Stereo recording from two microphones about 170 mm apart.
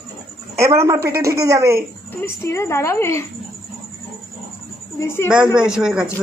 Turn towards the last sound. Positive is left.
turn(degrees=-5)  # may be behind; listen again after turning